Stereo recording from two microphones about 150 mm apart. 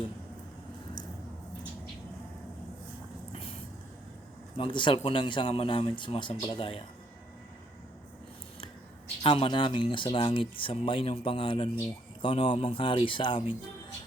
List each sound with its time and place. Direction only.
4.5 s speech: 35° left (ahead or behind)
9.2 s speech: 35° left (ahead or behind)